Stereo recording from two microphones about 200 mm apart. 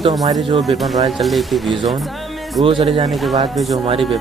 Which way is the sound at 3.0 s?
Centre (ahead or behind).